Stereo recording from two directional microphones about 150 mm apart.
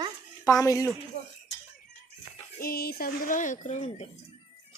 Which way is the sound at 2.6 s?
90° left.